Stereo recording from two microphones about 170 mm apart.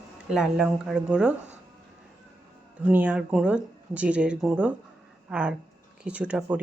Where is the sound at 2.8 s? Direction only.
10° right (ahead or behind).